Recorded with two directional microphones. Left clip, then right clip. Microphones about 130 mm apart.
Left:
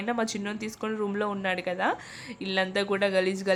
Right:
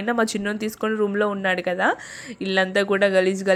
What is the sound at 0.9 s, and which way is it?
Speech, 30° right (ahead or behind).